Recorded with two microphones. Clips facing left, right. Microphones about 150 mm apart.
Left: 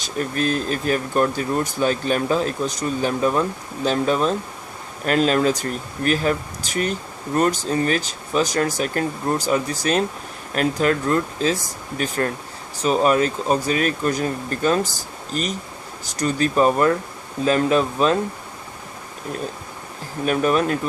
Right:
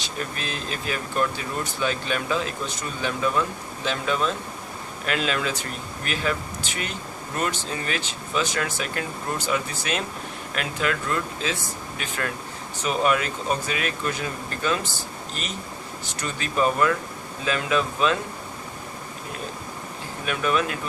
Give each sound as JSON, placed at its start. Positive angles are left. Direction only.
{"t": 0.0, "sound": "speech", "side_deg": 45}
{"t": 20.2, "sound": "speech", "side_deg": 40}